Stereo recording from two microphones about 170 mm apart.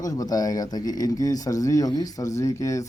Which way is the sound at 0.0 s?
20° left (ahead or behind).